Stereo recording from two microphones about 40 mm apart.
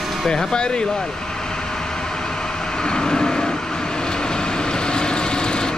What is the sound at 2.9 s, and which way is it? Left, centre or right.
Vehicle, centre.